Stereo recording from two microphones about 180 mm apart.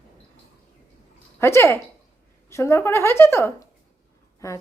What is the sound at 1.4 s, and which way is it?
A woman's voice, 15° left (ahead or behind).